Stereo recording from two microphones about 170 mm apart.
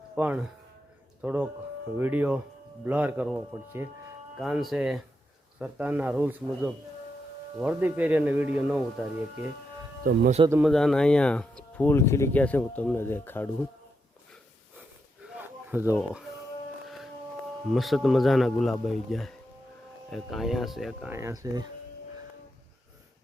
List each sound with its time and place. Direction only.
0.2 s a man's voice: 10° right (ahead or behind)
10.6 s speech: centre (ahead or behind)
15.4 s a sound: 10° right (ahead or behind)
17.7 s speech: centre (ahead or behind)
21.1 s speech: 15° right (ahead or behind)